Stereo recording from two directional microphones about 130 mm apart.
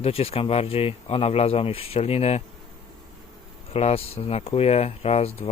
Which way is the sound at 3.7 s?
50° left (ahead or behind).